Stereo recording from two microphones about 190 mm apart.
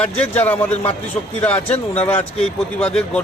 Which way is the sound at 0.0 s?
5° left (ahead or behind).